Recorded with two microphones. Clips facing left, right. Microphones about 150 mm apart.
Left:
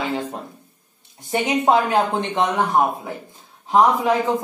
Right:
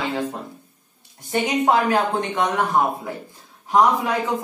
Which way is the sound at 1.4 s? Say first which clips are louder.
Left 1 dB; 20° left (ahead or behind).